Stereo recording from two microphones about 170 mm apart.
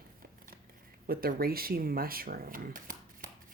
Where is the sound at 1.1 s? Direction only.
60° right (ahead or behind).